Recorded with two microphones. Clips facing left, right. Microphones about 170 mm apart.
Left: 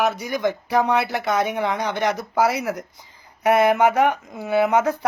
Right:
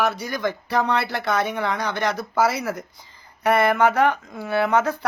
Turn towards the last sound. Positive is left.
turn(degrees=15)  # may be behind; listen again after turning